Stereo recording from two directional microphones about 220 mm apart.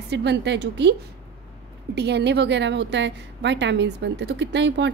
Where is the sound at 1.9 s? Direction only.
50° right (ahead or behind).